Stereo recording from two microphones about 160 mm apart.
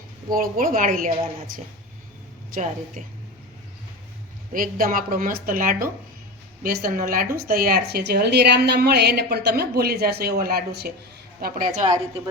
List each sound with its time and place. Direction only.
0.3 s a woman's voice: 60° right (ahead or behind)
2.6 s a woman's voice: 50° right (ahead or behind)
4.5 s a woman's voice: 60° right (ahead or behind); by 10.9 s 85° right
11.3 s a woman's voice: 65° right (ahead or behind)